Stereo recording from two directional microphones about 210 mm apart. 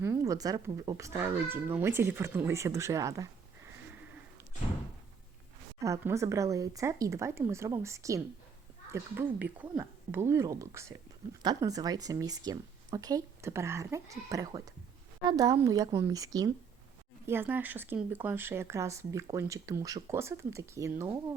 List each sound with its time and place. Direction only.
0.0 s speech: 10° right (ahead or behind)
5.8 s speech: 15° right (ahead or behind)